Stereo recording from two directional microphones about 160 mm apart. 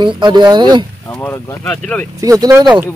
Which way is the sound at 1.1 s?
15° left (ahead or behind).